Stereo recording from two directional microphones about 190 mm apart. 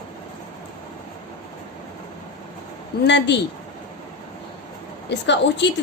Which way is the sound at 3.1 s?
65° left (ahead or behind).